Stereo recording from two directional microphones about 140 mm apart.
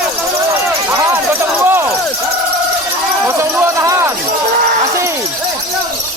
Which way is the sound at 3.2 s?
20° right (ahead or behind).